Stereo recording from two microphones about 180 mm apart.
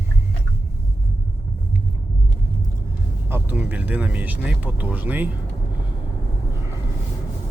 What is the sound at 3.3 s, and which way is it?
Speech, 10° right (ahead or behind).